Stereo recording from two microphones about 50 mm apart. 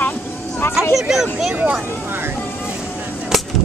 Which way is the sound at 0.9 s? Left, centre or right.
Centre.